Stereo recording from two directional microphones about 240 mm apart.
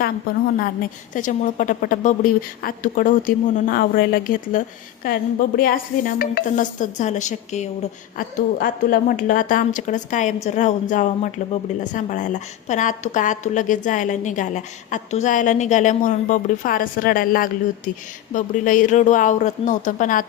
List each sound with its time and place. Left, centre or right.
1.1 s a woman's voice: left